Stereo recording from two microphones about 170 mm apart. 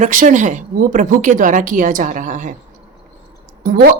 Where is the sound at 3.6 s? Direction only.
65° right (ahead or behind).